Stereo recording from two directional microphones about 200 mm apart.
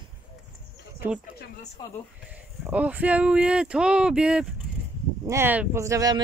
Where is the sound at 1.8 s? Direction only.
20° left (ahead or behind).